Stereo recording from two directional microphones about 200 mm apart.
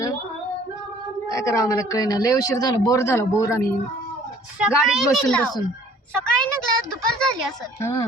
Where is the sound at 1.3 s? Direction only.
15° left (ahead or behind).